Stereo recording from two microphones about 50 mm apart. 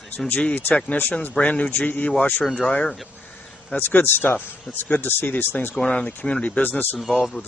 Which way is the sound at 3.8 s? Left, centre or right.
Left.